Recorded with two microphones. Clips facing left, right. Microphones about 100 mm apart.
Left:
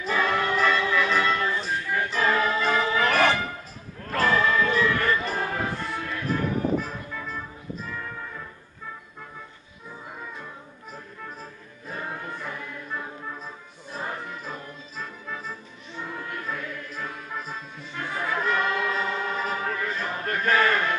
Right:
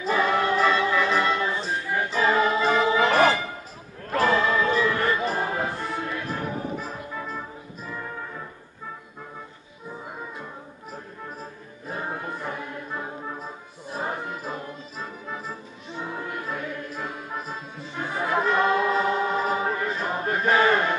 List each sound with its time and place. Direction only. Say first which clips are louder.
0.0 s choir: right 2 dB; 20° right (ahead or behind)
1.1 s music: right 1 dB; 20° right (ahead or behind)
4.1 s a sound: right 1 dB; 20° right (ahead or behind)
5.3 s music: right 2 dB; 20° right (ahead or behind)
11.9 s music: right 3 dB; 20° right (ahead or behind)
17.9 s choir: right 3 dB; 20° right (ahead or behind)